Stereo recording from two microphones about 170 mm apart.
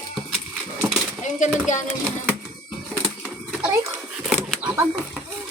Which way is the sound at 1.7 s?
45° left (ahead or behind).